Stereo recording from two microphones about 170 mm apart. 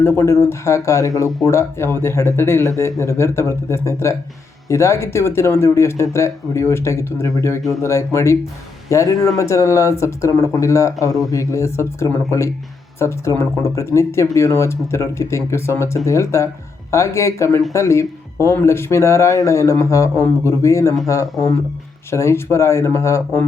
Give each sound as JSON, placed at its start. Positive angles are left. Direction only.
{"t": 0.0, "sound": "speech", "side_deg": 15}